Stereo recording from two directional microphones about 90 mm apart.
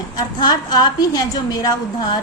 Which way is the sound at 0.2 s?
50° left (ahead or behind).